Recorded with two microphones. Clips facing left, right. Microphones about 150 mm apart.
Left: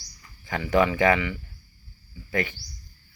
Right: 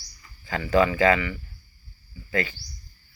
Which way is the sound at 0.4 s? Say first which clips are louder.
Right 1 dB; 15° left (ahead or behind).